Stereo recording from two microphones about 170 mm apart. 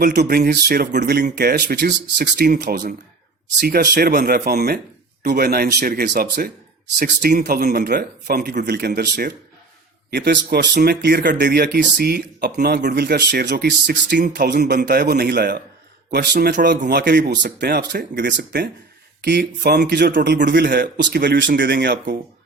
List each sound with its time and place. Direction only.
0.1 s speech: 70° right (ahead or behind)
8.9 s speech: 60° right (ahead or behind)
14.2 s speech: 55° right (ahead or behind); by 18.7 s 85° right
19.2 s speech: 70° right (ahead or behind)
20.6 s speech: 60° right (ahead or behind); by 22.2 s 80° right